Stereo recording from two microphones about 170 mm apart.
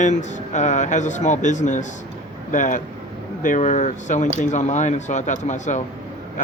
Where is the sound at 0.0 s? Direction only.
45° left (ahead or behind).